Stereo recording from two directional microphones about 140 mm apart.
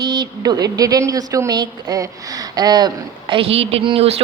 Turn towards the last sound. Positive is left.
turn(degrees=-45)  # may be behind; listen again after turning